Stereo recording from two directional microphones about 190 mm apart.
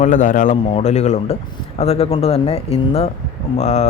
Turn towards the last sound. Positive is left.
turn(degrees=35)  # may be behind; listen again after turning